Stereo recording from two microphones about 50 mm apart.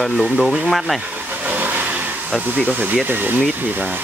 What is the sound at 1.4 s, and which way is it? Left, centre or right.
Vehicle, right.